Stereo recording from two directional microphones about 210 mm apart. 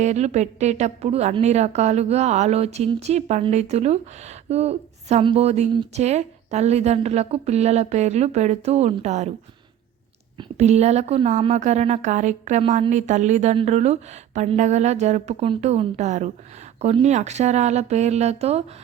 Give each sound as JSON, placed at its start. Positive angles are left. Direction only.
{"t": 0.0, "sound": "a woman's voice", "side_deg": -35}
{"t": 10.3, "sound": "a woman's voice", "side_deg": -30}